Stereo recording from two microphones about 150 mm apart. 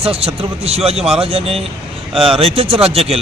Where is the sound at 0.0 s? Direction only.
40° right (ahead or behind).